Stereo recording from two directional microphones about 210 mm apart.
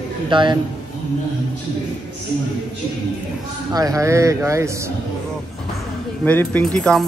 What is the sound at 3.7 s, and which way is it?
Speech, 15° right (ahead or behind).